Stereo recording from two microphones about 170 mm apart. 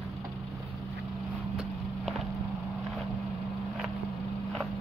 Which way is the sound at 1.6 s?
Centre (ahead or behind).